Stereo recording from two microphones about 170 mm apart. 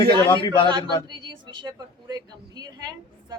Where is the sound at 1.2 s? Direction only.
30° right (ahead or behind).